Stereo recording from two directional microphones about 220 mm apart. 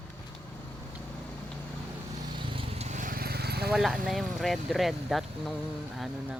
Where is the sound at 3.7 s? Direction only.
Centre (ahead or behind).